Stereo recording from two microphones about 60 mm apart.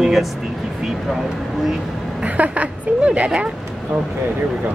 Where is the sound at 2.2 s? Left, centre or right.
Right.